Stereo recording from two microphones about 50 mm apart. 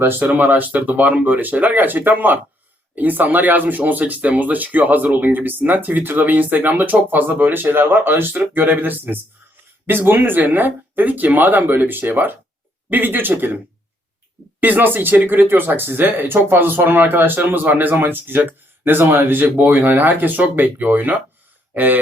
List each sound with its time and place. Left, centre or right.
0.0 s speech: right
0.3 s speech: right
14.6 s speech: right